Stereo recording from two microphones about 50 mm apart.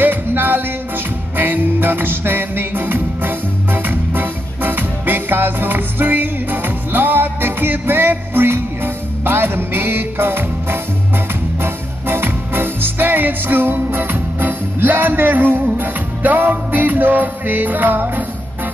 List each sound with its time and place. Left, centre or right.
0.0 s music: right